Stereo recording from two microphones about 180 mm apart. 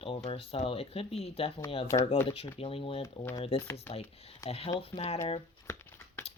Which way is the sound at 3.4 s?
30° left (ahead or behind).